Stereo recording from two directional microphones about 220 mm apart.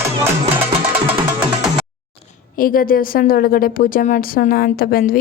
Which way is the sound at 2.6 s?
40° left (ahead or behind).